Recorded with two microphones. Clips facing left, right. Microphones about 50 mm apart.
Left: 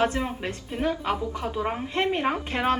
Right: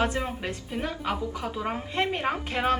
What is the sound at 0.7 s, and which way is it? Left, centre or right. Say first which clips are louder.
A woman's voice: left 5 dB; centre.